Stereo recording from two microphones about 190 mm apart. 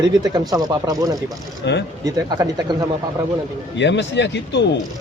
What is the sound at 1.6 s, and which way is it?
Speech, 65° left (ahead or behind).